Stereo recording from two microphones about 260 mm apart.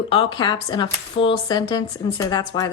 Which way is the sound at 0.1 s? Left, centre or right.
Centre.